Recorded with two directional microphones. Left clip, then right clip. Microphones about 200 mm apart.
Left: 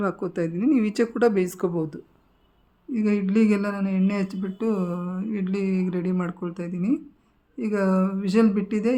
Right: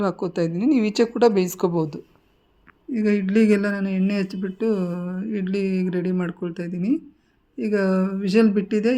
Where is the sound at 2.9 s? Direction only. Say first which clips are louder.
Right 3 dB; 10° right (ahead or behind).